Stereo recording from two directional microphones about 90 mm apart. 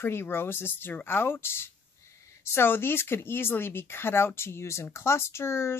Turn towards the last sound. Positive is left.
turn(degrees=30)  # may be behind; listen again after turning